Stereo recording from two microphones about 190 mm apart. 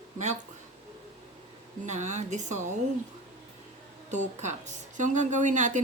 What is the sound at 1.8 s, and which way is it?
Speech, 40° right (ahead or behind).